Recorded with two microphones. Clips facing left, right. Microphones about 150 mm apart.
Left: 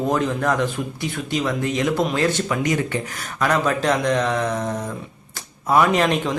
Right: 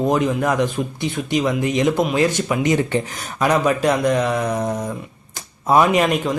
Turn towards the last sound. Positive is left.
turn(degrees=-5)  # may be behind; listen again after turning